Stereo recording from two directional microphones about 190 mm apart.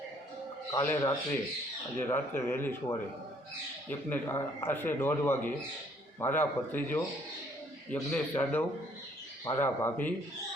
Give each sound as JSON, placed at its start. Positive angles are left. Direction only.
{"t": 0.7, "sound": "speech", "side_deg": 15}